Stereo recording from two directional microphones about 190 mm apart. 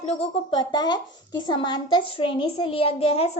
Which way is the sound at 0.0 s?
35° left (ahead or behind).